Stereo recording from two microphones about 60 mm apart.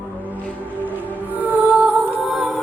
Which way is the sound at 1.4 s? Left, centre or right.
Right.